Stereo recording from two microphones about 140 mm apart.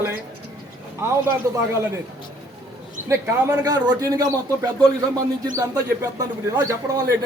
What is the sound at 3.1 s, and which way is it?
A man's voice, 20° right (ahead or behind).